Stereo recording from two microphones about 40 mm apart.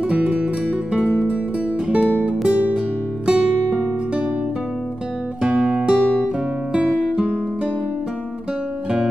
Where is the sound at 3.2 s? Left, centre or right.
Right.